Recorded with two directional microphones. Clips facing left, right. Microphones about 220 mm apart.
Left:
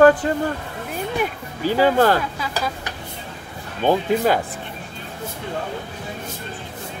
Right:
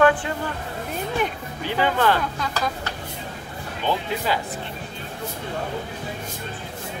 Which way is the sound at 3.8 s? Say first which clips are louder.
Left 7 dB; 50° left (ahead or behind).